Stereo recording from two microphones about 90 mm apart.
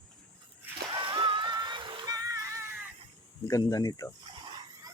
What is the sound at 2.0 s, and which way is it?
Music, 45° right (ahead or behind).